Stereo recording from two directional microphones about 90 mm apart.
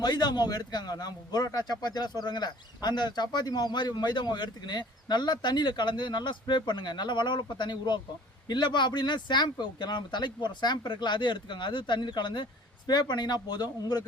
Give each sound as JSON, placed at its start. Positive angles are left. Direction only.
{"t": 0.0, "sound": "a man's voice", "side_deg": 50}